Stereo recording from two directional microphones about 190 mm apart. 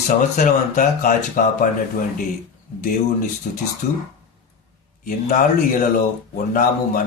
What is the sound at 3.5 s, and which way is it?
Speech, 40° left (ahead or behind).